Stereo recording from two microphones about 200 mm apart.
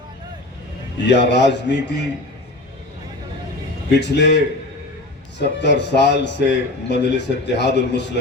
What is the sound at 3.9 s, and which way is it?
A man's voice, 60° left (ahead or behind).